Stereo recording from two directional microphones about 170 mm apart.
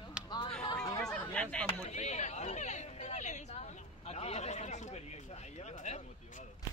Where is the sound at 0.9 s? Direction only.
5° left (ahead or behind).